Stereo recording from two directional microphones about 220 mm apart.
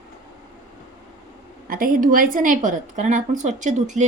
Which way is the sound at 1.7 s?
40° right (ahead or behind).